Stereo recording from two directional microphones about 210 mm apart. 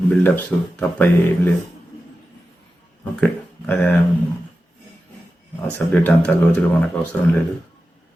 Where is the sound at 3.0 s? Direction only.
5° left (ahead or behind).